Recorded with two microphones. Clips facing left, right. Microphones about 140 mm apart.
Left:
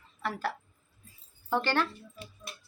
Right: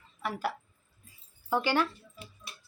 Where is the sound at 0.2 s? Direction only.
10° right (ahead or behind).